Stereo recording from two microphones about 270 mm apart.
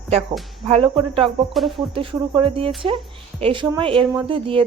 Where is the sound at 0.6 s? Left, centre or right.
Centre.